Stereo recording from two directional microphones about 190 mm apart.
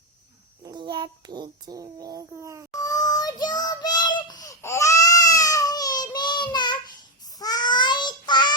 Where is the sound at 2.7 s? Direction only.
20° left (ahead or behind).